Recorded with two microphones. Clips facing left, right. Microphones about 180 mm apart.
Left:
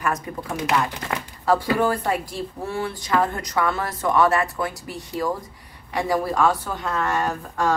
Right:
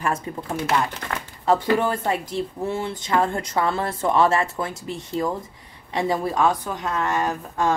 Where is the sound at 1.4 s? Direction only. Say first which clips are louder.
Even; 25° right (ahead or behind).